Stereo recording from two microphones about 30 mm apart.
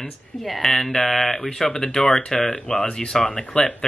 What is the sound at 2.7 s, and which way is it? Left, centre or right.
Speech, left.